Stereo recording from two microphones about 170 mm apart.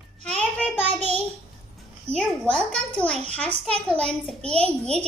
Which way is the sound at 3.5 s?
35° right (ahead or behind).